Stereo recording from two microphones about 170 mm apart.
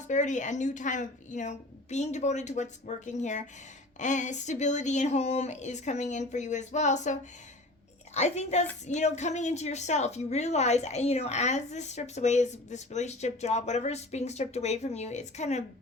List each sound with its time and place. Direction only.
0.1 s a woman's voice: 45° left (ahead or behind)